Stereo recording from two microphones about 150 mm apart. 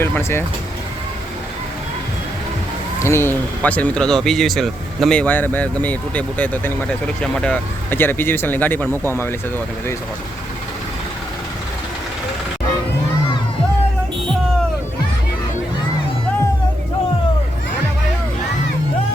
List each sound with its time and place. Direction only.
0.0 s speech: 15° left (ahead or behind)
3.0 s speech: 15° left (ahead or behind)